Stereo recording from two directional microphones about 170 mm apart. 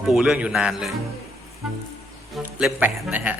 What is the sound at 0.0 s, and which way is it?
Speech, centre (ahead or behind).